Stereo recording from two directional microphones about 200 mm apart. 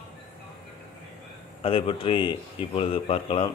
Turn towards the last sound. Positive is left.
turn(degrees=30)  # may be behind; listen again after turning